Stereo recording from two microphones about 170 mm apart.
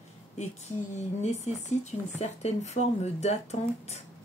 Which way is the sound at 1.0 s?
40° left (ahead or behind).